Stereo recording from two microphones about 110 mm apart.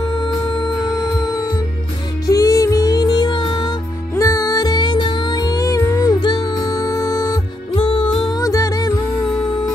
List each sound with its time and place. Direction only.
2.2 s music: 30° left (ahead or behind)
4.1 s music: 30° left (ahead or behind)
7.7 s music: 55° left (ahead or behind)
8.4 s music: 30° left (ahead or behind)